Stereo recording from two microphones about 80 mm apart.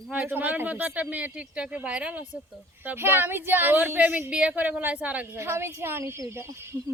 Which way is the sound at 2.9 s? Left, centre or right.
Right.